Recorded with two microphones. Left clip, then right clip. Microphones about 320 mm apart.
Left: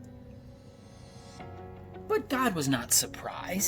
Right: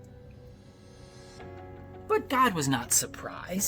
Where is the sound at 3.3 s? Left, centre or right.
Right.